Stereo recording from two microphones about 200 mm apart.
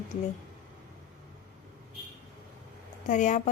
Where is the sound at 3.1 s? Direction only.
40° left (ahead or behind).